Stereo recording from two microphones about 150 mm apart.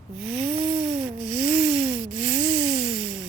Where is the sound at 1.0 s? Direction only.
5° right (ahead or behind).